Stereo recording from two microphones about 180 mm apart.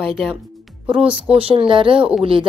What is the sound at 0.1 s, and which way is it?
Speech, 5° right (ahead or behind).